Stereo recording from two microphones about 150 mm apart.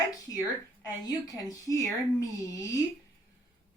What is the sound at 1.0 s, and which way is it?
Speech, 25° left (ahead or behind).